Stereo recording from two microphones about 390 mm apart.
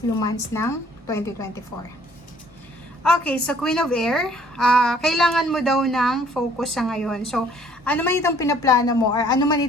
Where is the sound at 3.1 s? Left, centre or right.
Centre.